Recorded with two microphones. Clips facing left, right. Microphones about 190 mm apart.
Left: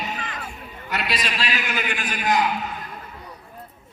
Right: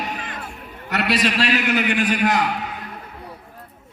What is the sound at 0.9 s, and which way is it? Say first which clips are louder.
A man's voice: right 7 dB; 65° right (ahead or behind).